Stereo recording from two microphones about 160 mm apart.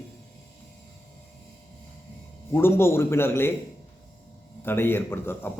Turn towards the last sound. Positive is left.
turn(degrees=15)  # may be behind; listen again after turning